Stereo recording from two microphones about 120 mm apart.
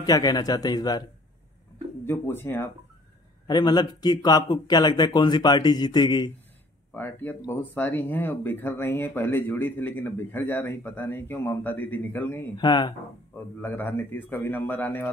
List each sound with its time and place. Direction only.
0.0 s speech: 35° left (ahead or behind)
2.0 s speech: 20° left (ahead or behind)
3.4 s speech: 35° left (ahead or behind)
6.9 s speech: 15° left (ahead or behind)
12.5 s speech: 40° left (ahead or behind)
13.6 s speech: 15° left (ahead or behind)